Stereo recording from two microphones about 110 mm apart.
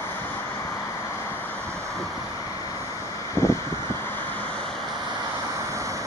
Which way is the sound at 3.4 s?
20° left (ahead or behind).